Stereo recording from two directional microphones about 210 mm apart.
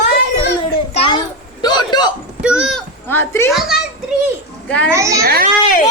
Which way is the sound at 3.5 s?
Centre (ahead or behind).